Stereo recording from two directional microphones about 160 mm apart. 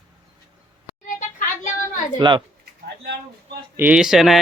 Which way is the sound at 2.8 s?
90° right.